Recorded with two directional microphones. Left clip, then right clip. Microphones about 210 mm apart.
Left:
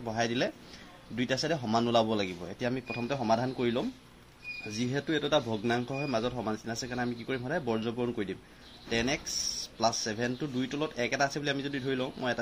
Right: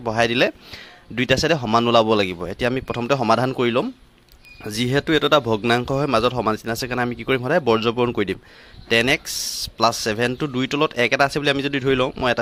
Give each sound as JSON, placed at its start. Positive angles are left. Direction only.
{"t": 0.0, "sound": "speech", "side_deg": -40}